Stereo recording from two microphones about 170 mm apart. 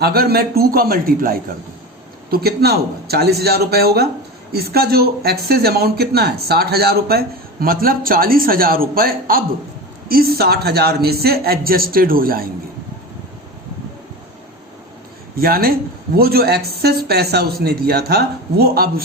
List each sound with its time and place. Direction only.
0.0 s a man's voice: 65° right (ahead or behind)
15.4 s a man's voice: 60° right (ahead or behind)